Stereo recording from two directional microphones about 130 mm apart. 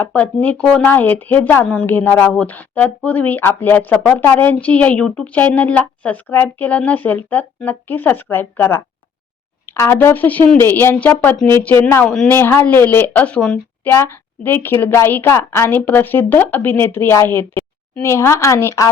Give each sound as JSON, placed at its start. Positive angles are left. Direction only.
{"t": 0.0, "sound": "a woman's voice", "side_deg": 10}